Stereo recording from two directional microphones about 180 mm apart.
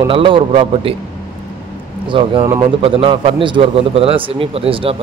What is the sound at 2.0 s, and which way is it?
Speech, 30° right (ahead or behind).